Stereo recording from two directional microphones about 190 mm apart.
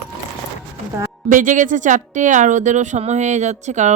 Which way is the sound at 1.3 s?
45° right (ahead or behind).